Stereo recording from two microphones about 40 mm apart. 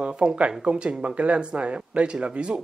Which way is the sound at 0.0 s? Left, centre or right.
Right.